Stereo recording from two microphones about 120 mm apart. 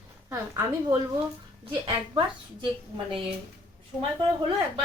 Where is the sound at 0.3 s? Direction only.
20° right (ahead or behind).